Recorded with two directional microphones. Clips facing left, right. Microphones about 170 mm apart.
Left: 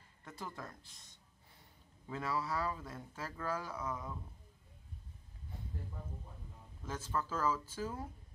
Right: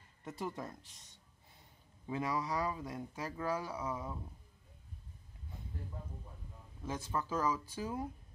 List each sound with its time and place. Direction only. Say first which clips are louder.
0.2 s speech: right 5 dB; 20° right (ahead or behind)
2.0 s speech: right 2 dB; 15° right (ahead or behind)
6.8 s speech: right 1 dB; 15° right (ahead or behind)